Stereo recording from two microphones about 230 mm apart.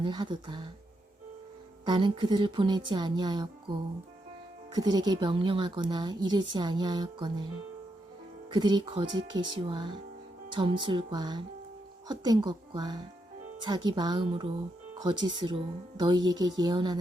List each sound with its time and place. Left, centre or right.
0.0 s a woman's voice: centre
1.9 s a woman's voice: right
8.4 s a woman's voice: centre